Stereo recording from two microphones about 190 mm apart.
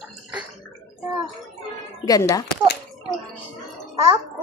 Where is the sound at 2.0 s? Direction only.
20° left (ahead or behind).